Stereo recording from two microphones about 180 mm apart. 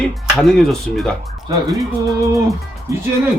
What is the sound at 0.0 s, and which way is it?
Speech, centre (ahead or behind).